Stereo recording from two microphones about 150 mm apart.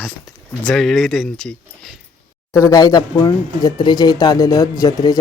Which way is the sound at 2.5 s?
20° left (ahead or behind).